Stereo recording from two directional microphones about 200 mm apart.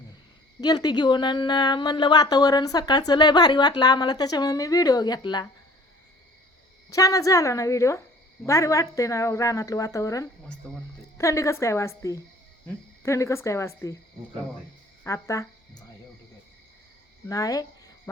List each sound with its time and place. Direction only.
0.6 s a woman's voice: 20° left (ahead or behind)
6.9 s a woman's voice: 15° left (ahead or behind)
15.0 s speech: 15° left (ahead or behind)
17.2 s speech: 15° left (ahead or behind)